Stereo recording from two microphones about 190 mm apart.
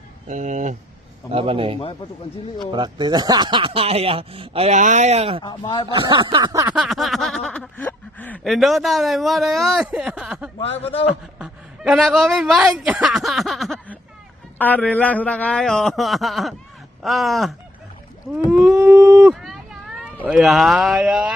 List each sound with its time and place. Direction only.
0.3 s speech: 40° right (ahead or behind)
1.3 s speech: 30° right (ahead or behind)
5.4 s speech: 20° left (ahead or behind)
5.9 s speech: 25° right (ahead or behind)
6.7 s snicker: centre (ahead or behind)
18.9 s a sound: 5° right (ahead or behind)
20.2 s snicker: centre (ahead or behind)